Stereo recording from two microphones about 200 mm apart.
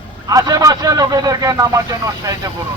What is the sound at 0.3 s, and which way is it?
Speech, 15° right (ahead or behind).